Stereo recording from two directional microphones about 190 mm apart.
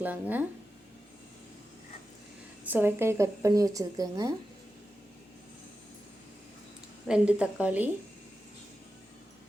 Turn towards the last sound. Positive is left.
turn(degrees=-10)  # may be behind; listen again after turning